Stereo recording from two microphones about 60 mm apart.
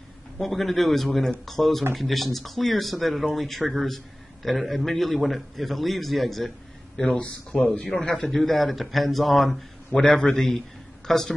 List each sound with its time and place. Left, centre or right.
0.4 s speech: centre
7.2 s speech: centre
10.0 s a man's voice: centre